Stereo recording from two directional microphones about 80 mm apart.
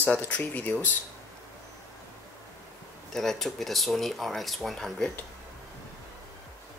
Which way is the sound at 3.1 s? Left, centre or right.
Centre.